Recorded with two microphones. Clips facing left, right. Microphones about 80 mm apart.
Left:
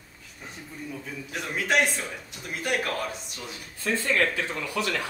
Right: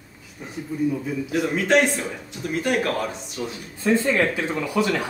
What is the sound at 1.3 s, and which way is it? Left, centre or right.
A man's voice, centre.